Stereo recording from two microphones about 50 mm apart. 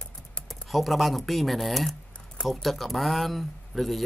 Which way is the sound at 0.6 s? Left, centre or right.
Centre.